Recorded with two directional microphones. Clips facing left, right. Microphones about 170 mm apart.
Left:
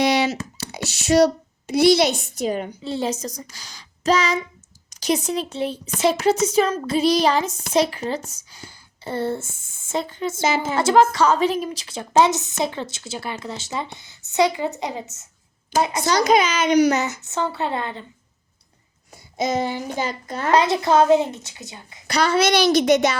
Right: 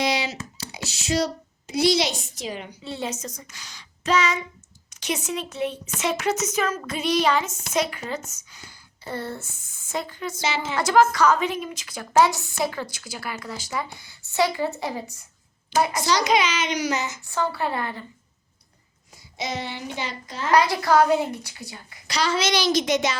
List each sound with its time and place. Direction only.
0.0 s a sound: 65° left (ahead or behind)
2.8 s a woman's voice: 35° left (ahead or behind)
10.4 s a child's voice: 45° left (ahead or behind)
10.8 s a woman's voice: 30° left (ahead or behind)
16.0 s a child's voice: 45° left (ahead or behind)
17.2 s a woman's voice: 20° left (ahead or behind)
19.1 s a child's voice: 45° left (ahead or behind)
20.5 s a woman's voice: 20° left (ahead or behind)
22.0 s speech: 55° left (ahead or behind)